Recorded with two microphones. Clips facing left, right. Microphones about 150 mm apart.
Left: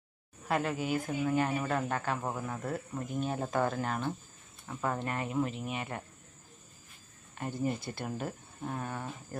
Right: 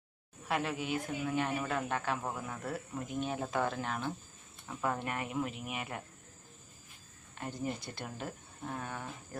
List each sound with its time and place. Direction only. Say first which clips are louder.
0.4 s speech: left 3 dB; centre (ahead or behind)
2.2 s speech: left 3 dB; 20° left (ahead or behind)
3.1 s speech: left 2 dB; centre (ahead or behind)
7.3 s speech: left 4 dB; centre (ahead or behind)